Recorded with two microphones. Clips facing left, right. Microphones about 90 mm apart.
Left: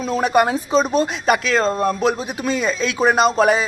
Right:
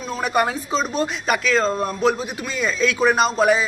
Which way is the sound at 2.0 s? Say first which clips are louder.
Even; 20° left (ahead or behind).